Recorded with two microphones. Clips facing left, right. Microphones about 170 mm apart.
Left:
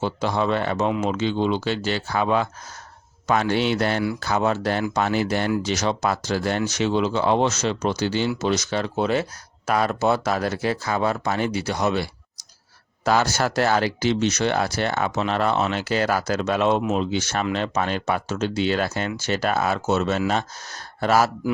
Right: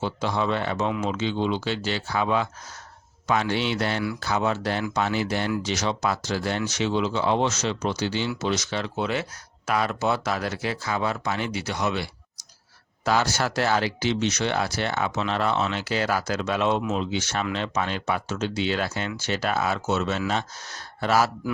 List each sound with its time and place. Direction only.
0.0 s speech: 45° left (ahead or behind)
13.1 s speech: 45° left (ahead or behind)